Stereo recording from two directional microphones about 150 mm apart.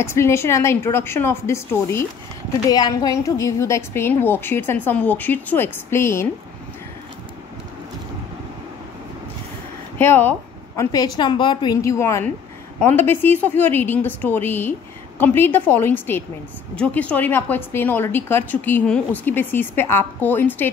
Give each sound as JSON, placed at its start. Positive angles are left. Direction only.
{"t": 0.0, "sound": "a woman's voice", "side_deg": 15}
{"t": 9.9, "sound": "a woman's voice", "side_deg": 15}
{"t": 10.8, "sound": "a woman's voice", "side_deg": 25}